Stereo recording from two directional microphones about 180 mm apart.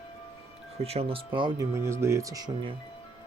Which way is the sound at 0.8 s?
30° right (ahead or behind).